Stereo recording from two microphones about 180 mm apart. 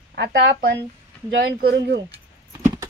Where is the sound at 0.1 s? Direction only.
70° right (ahead or behind).